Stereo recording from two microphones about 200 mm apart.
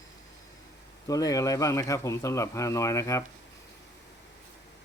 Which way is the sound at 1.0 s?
15° left (ahead or behind).